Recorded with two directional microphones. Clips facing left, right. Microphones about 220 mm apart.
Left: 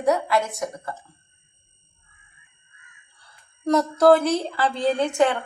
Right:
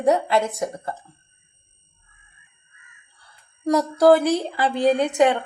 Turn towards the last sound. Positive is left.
turn(degrees=-15)  # may be behind; listen again after turning